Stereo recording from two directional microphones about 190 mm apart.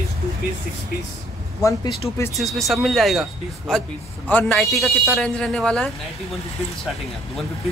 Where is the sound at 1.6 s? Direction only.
15° left (ahead or behind).